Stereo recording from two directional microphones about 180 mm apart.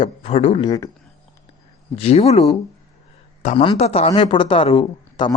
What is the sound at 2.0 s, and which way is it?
Speech, 35° left (ahead or behind).